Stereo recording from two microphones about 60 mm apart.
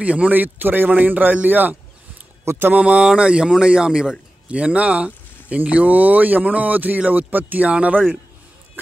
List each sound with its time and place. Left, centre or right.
0.0 s a man's voice: right
2.7 s a man's voice: centre